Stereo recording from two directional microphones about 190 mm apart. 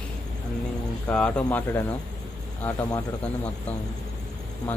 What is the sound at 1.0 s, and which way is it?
Speech, 5° left (ahead or behind).